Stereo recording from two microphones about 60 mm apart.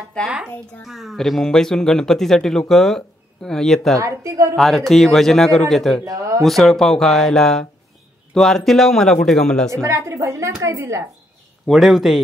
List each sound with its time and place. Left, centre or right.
0.8 s a man's voice: centre
4.0 s a woman's voice: right
4.6 s a man's voice: centre
6.0 s speech: right
6.4 s a man's voice: centre
9.8 s a woman's voice: right
11.6 s a man's voice: centre